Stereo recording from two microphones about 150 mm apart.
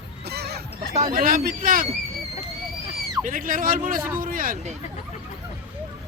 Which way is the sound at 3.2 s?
65° right (ahead or behind).